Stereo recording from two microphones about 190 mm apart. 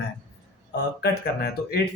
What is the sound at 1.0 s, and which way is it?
Speech, 55° left (ahead or behind).